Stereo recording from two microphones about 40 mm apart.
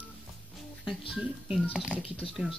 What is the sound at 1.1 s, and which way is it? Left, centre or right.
Speech, centre.